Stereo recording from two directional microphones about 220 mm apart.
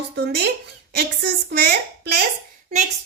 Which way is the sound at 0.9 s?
50° right (ahead or behind).